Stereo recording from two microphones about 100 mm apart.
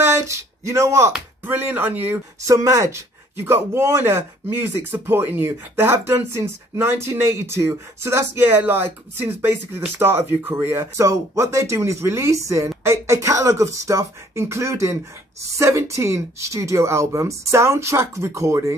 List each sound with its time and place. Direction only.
0.0 s a sound: 30° right (ahead or behind)
1.4 s speech: 20° right (ahead or behind)
2.4 s speech: 35° right (ahead or behind)